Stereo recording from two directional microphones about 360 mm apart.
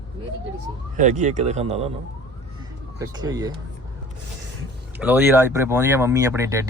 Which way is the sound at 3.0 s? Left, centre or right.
Centre.